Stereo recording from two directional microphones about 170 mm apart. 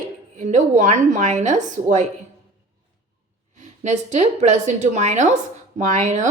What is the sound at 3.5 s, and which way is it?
A woman's voice, 45° right (ahead or behind).